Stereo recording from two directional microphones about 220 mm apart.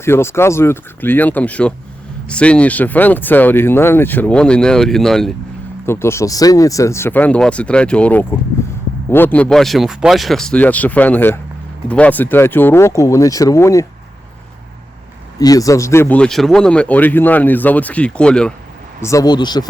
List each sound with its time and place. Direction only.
0.0 s speech: 10° left (ahead or behind)
15.4 s speech: 15° left (ahead or behind)
19.0 s speech: 15° left (ahead or behind)